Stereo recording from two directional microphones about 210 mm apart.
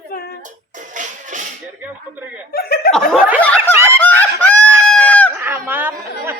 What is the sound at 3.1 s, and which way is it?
Snicker, 5° right (ahead or behind).